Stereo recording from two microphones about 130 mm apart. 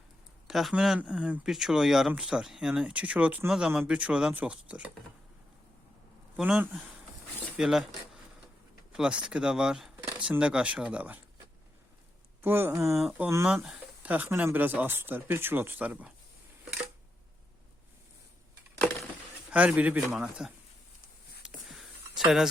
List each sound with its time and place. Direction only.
0.4 s speech: centre (ahead or behind)
6.3 s speech: 10° right (ahead or behind)
12.4 s speech: 15° right (ahead or behind)
13.0 s speech: 10° right (ahead or behind)
19.5 s speech: 10° right (ahead or behind)
21.4 s a sound: centre (ahead or behind)